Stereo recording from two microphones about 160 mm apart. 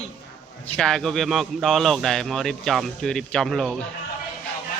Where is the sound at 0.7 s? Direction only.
5° left (ahead or behind).